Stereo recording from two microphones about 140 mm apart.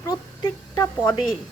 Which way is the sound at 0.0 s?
25° left (ahead or behind).